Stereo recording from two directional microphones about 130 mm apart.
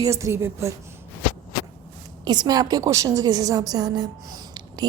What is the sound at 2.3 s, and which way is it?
A woman's voice, 35° right (ahead or behind).